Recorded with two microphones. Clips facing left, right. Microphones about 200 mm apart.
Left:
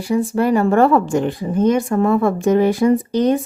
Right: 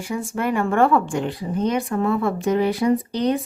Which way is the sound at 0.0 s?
35° left (ahead or behind).